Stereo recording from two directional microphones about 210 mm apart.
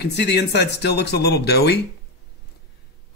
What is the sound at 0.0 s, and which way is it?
Speech, 55° left (ahead or behind).